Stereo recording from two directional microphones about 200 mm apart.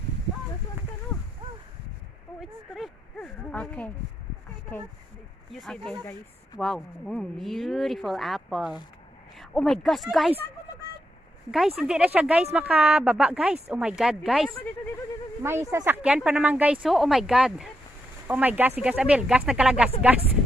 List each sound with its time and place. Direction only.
2.7 s a sound: centre (ahead or behind)
5.5 s speech: centre (ahead or behind)
11.5 s speech: centre (ahead or behind)
15.7 s speech: 10° right (ahead or behind)